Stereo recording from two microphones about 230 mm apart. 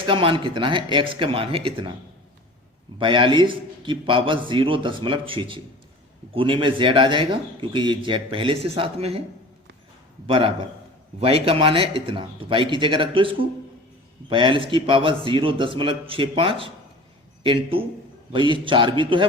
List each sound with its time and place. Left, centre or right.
0.0 s a man's voice: right
3.0 s a man's voice: right
10.2 s a man's voice: right